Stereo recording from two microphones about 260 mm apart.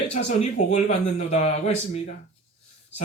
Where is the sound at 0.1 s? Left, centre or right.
Left.